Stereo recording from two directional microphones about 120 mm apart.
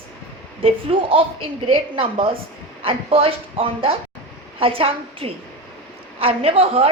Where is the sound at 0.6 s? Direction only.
50° right (ahead or behind).